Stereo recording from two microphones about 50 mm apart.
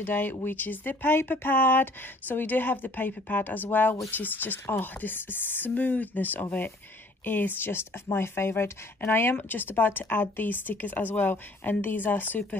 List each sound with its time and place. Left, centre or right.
0.0 s speech: left
9.0 s speech: left